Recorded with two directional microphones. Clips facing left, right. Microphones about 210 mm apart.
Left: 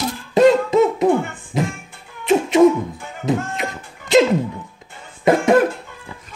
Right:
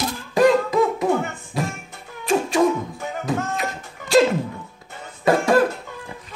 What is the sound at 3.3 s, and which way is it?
Music, 20° left (ahead or behind).